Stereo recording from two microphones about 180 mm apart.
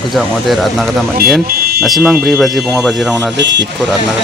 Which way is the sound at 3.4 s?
80° right.